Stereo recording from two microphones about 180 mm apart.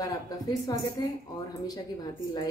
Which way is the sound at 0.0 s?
20° left (ahead or behind).